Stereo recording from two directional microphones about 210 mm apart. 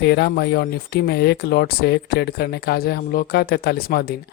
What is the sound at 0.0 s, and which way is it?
Speech, 50° left (ahead or behind).